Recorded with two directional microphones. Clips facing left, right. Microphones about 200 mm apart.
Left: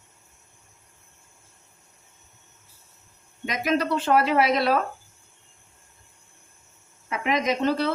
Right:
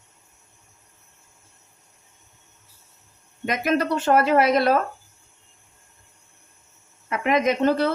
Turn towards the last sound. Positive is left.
turn(degrees=-50)  # may be behind; listen again after turning